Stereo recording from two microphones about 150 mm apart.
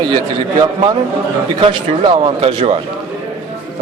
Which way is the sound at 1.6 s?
35° right (ahead or behind).